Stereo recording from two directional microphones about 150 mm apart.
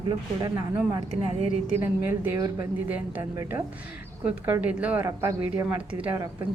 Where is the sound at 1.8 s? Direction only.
15° right (ahead or behind).